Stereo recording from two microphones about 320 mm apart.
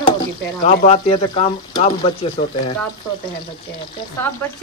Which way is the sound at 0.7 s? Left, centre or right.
Centre.